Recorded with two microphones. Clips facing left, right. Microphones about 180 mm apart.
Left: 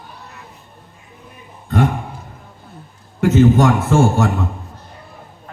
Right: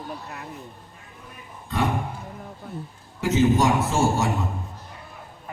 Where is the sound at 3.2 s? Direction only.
55° left (ahead or behind).